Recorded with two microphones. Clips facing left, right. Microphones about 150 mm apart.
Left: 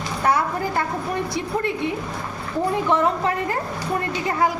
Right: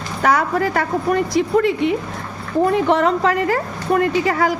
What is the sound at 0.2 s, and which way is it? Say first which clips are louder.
A woman's voice: right 4 dB; 90° right.